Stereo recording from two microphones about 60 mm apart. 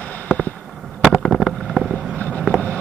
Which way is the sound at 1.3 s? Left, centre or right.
Centre.